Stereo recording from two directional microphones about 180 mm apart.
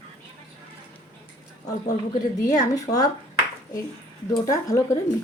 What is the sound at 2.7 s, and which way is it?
Speech, 20° left (ahead or behind).